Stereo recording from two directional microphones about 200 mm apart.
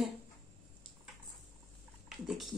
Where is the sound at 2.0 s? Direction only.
Centre (ahead or behind).